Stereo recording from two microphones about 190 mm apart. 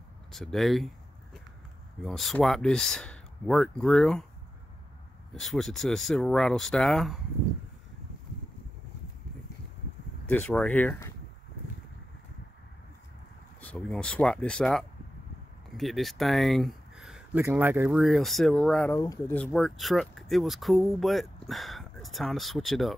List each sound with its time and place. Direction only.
0.3 s a sound: centre (ahead or behind)
2.0 s speech: centre (ahead or behind)
5.3 s speech: centre (ahead or behind)
10.3 s speech: 5° left (ahead or behind)
13.6 s speech: 5° left (ahead or behind)
18.9 s speech: 15° left (ahead or behind)
19.3 s speech: 5° left (ahead or behind)